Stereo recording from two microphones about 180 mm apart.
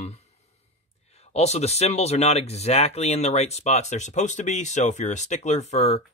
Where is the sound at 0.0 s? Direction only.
35° left (ahead or behind).